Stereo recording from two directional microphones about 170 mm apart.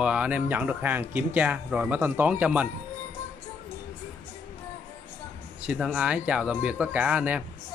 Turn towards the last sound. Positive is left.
turn(degrees=-10)  # may be behind; listen again after turning